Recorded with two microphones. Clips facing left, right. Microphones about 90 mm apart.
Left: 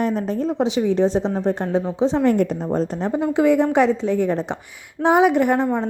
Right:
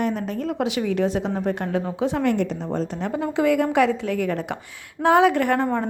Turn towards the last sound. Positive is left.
turn(degrees=15)  # may be behind; listen again after turning